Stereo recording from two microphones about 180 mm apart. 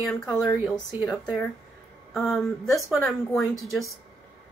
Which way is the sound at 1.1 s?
5° left (ahead or behind).